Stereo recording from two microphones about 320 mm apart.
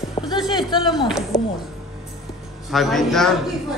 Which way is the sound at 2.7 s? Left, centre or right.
Centre.